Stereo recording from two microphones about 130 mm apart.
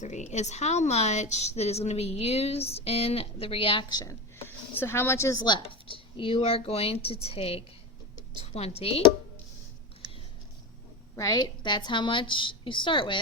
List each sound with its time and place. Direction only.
0.0 s a woman's voice: 65° left (ahead or behind); by 4.1 s 35° left (ahead or behind)
4.4 s a woman's voice: 15° left (ahead or behind); by 9.0 s 50° left (ahead or behind)
11.2 s a woman's voice: 30° left (ahead or behind)